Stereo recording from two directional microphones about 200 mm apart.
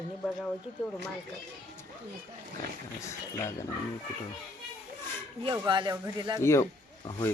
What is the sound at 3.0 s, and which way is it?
Speech, 15° left (ahead or behind).